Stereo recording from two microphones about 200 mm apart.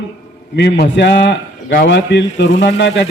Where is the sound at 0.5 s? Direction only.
60° left (ahead or behind).